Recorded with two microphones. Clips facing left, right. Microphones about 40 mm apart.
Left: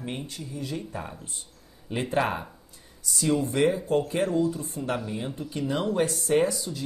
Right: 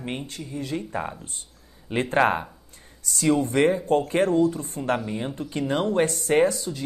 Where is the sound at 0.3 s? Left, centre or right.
Right.